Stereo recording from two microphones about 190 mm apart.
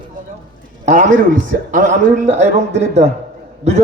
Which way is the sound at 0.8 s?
40° right (ahead or behind).